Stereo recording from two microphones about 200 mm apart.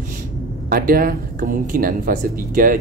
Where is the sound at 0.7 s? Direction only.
45° right (ahead or behind).